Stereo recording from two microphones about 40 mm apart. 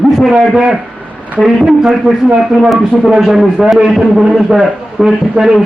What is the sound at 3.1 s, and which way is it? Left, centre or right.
A man's voice, centre.